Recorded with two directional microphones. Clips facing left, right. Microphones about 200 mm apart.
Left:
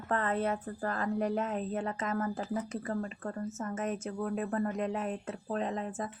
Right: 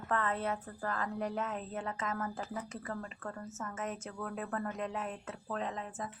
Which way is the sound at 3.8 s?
25° left (ahead or behind).